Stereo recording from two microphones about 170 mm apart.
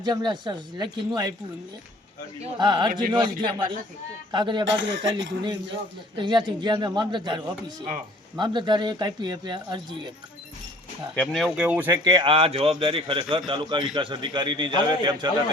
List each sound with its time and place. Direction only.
0.0 s speech: 25° right (ahead or behind)
2.4 s speech: 25° right (ahead or behind)
4.8 s speech: 90° right
6.1 s speech: 25° right (ahead or behind)
11.1 s speech: 5° left (ahead or behind); by 11.9 s 10° right (ahead or behind)
12.0 s a man's voice: 25° right (ahead or behind)